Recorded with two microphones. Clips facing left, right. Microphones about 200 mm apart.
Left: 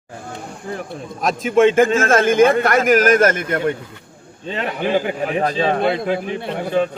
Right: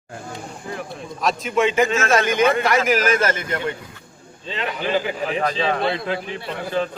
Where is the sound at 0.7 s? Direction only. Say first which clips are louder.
Left 3 dB; 40° left (ahead or behind).